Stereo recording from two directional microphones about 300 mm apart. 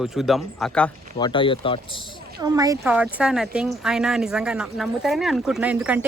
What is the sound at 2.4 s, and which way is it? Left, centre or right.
A woman's voice, centre.